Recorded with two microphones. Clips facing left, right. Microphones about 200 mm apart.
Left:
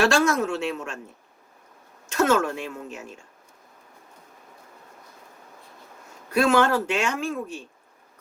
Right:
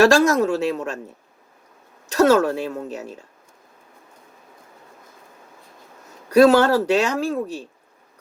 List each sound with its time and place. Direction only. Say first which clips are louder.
0.0 s speech: right 6 dB; 40° right (ahead or behind)
2.0 s speech: right 6 dB; 35° right (ahead or behind)
6.3 s speech: right 7 dB; 40° right (ahead or behind)